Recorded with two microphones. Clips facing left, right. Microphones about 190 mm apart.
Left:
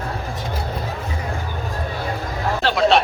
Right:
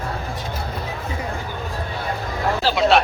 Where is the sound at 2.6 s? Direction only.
Centre (ahead or behind).